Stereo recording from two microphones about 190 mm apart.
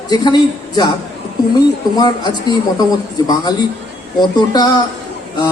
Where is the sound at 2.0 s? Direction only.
20° left (ahead or behind).